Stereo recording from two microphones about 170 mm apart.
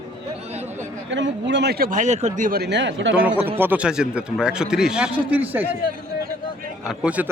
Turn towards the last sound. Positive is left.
turn(degrees=-10)  # may be behind; listen again after turning